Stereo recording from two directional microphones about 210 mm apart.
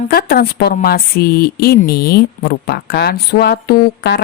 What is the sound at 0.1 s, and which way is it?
Speech, 45° left (ahead or behind).